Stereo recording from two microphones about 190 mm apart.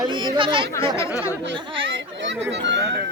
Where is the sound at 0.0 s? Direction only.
25° right (ahead or behind).